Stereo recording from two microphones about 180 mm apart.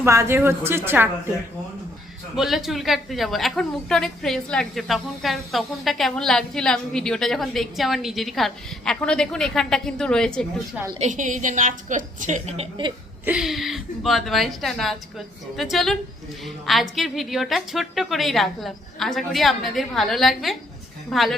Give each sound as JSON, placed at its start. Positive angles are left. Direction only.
{"t": 0.0, "sound": "a woman's voice", "side_deg": -15}
{"t": 2.3, "sound": "a woman's voice", "side_deg": 0}
{"t": 11.0, "sound": "a woman's voice", "side_deg": -45}
{"t": 13.2, "sound": "a woman's voice", "side_deg": -5}